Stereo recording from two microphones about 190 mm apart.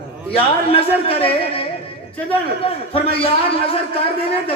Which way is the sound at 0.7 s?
30° left (ahead or behind).